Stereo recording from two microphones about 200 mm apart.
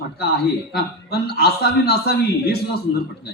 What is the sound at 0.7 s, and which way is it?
Speech, 50° left (ahead or behind).